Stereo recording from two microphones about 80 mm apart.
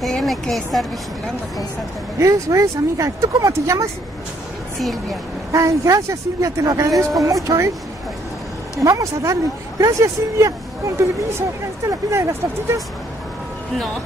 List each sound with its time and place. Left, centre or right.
0.0 s speech: centre
2.1 s speech: right
5.5 s speech: right
8.9 s speech: right
12.1 s speech: right